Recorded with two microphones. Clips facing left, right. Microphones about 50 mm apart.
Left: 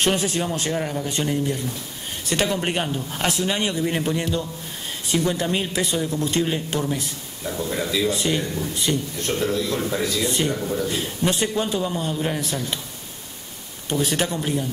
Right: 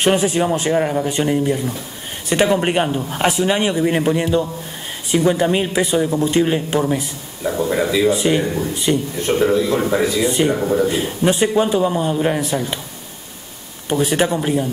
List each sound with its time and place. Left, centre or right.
0.0 s speech: centre
10.6 s speech: right
10.9 s speech: centre
13.9 s speech: centre